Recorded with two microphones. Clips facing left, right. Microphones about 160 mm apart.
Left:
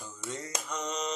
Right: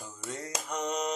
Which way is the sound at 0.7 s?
55° right (ahead or behind).